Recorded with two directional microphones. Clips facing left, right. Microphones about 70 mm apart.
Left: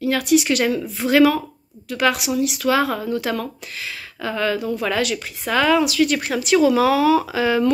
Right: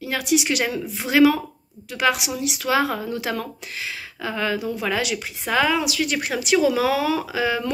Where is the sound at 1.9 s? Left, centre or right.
Right.